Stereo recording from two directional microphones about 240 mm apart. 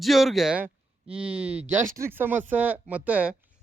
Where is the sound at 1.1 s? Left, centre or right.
Right.